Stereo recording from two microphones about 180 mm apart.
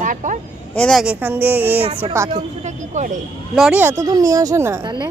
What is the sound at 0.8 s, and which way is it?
Speech, centre (ahead or behind).